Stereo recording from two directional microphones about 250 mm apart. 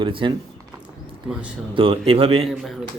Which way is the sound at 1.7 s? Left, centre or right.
Right.